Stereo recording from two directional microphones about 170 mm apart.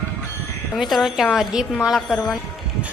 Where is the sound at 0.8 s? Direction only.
Centre (ahead or behind).